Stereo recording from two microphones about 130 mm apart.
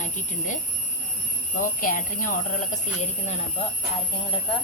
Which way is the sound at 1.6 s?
90° left.